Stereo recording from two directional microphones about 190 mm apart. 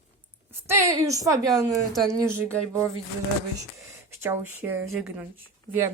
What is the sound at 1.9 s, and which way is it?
Speech, centre (ahead or behind).